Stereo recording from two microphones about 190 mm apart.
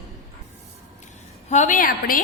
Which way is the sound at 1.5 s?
40° left (ahead or behind).